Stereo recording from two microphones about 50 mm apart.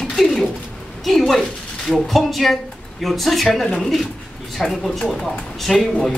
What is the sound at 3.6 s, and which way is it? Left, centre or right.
Speech, centre.